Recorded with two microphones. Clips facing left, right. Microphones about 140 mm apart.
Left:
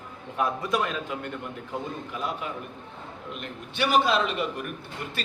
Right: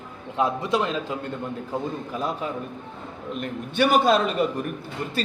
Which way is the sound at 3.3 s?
45° right (ahead or behind).